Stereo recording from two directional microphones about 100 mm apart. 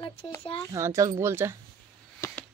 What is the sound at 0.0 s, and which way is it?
Speech, 30° left (ahead or behind).